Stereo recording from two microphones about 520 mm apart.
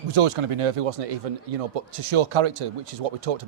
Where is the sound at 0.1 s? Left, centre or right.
Right.